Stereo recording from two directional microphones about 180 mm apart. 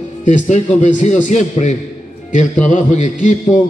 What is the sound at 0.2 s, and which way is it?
A man's voice, 45° left (ahead or behind).